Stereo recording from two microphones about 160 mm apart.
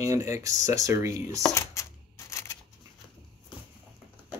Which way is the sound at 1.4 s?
20° left (ahead or behind).